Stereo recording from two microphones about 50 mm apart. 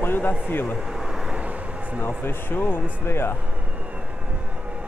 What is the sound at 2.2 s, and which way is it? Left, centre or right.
Speech, left.